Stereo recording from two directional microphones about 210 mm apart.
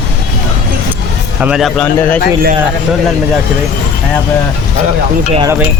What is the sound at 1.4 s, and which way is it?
Speech, 5° right (ahead or behind).